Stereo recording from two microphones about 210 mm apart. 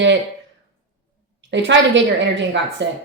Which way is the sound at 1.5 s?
60° right (ahead or behind).